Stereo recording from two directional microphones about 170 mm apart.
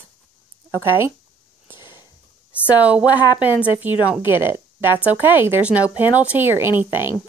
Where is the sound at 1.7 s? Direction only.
15° right (ahead or behind).